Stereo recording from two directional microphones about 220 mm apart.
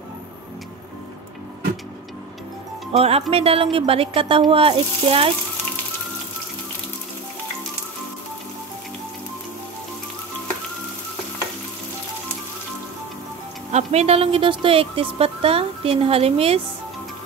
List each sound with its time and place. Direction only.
3.0 s speech: 25° right (ahead or behind)
13.7 s speech: 30° right (ahead or behind)